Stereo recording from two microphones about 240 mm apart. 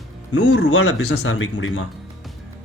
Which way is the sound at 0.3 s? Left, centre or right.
Left.